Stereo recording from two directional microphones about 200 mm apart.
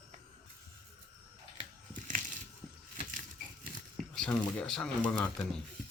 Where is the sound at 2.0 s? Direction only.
40° right (ahead or behind).